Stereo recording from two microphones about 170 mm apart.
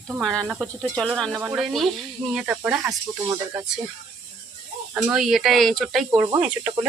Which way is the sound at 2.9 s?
15° right (ahead or behind).